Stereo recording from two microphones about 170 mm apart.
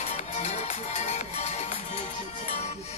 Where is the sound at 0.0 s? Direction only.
40° left (ahead or behind).